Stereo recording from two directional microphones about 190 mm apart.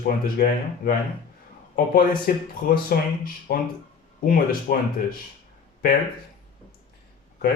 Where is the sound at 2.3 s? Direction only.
50° left (ahead or behind).